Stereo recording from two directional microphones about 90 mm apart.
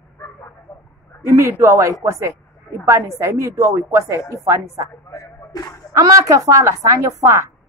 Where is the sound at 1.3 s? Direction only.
30° right (ahead or behind).